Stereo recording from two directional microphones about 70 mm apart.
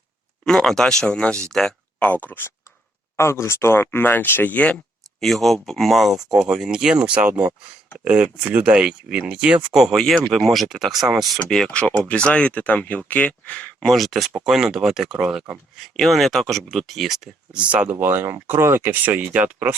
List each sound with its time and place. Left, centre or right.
0.4 s speech: centre; by 2.5 s left
3.2 s speech: left; by 4.8 s centre
5.2 s speech: centre
9.7 s speech: centre
11.7 s speech: centre
13.7 s speech: centre
15.8 s speech: centre
17.5 s speech: centre
18.0 s speech: right